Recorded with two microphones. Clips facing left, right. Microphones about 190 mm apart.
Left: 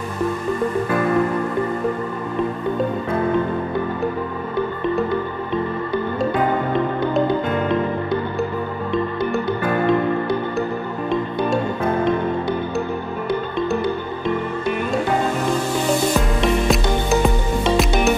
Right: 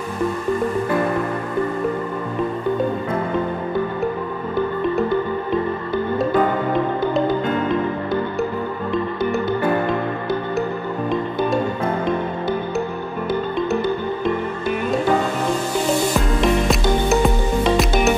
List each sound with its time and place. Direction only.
7.0 s music: centre (ahead or behind)
11.1 s music: centre (ahead or behind)
16.3 s music: centre (ahead or behind)